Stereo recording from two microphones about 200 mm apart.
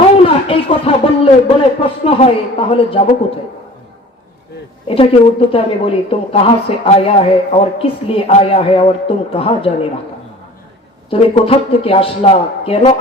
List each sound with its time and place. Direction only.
0.2 s a sound: 25° left (ahead or behind)
4.9 s a woman's voice: 30° left (ahead or behind)
11.1 s a woman's voice: 30° left (ahead or behind)